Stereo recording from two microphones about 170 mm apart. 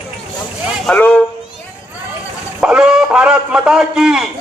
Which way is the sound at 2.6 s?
5° right (ahead or behind).